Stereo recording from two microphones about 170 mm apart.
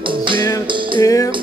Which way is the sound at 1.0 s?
20° left (ahead or behind).